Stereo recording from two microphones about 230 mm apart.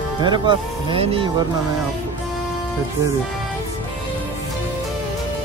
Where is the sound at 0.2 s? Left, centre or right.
Centre.